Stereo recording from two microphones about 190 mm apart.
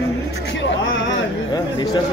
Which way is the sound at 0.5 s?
80° left.